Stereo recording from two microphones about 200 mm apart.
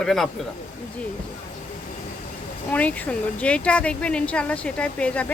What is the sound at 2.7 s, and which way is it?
Speech, 10° left (ahead or behind).